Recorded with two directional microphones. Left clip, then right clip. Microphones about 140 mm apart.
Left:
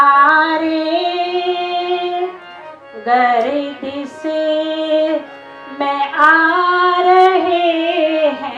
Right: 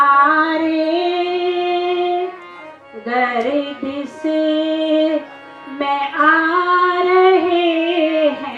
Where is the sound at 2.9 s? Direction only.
30° left (ahead or behind).